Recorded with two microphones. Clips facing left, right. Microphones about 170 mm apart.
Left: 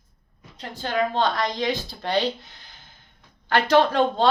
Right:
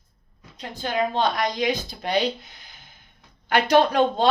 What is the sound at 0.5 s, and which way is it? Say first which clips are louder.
A woman's voice: even; 15° right (ahead or behind).